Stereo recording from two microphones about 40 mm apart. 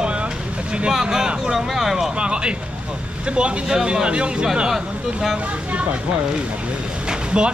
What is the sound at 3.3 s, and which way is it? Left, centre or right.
Speech, right.